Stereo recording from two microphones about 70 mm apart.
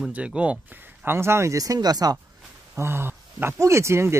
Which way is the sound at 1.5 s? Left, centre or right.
Right.